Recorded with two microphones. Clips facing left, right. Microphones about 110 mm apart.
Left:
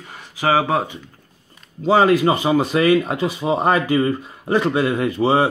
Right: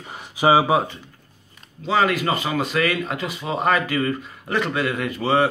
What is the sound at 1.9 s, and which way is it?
Speech, 30° left (ahead or behind).